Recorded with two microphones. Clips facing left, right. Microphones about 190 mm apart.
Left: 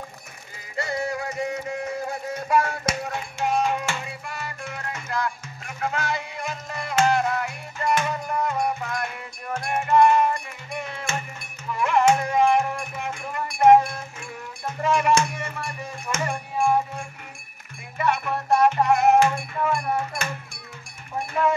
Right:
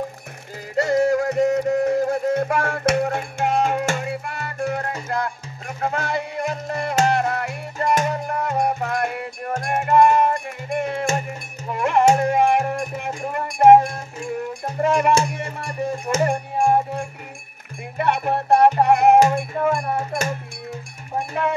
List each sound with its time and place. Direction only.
0.7 s music: 45° right (ahead or behind)
5.8 s music: 35° right (ahead or behind)
6.0 s music: 55° right (ahead or behind)
15.4 s music: 35° right (ahead or behind)
17.9 s music: 60° right (ahead or behind)
19.1 s music: 40° right (ahead or behind)